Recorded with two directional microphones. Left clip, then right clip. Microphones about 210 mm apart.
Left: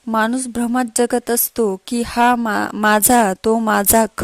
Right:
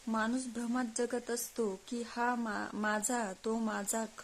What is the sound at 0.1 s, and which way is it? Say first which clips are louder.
A woman's voice: left 17 dB; 45° left (ahead or behind).